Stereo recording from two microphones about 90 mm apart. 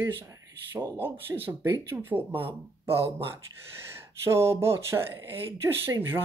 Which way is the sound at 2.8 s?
25° right (ahead or behind).